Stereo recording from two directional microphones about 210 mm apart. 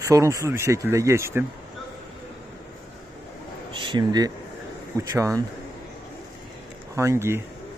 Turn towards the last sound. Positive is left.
turn(degrees=-10)  # may be behind; listen again after turning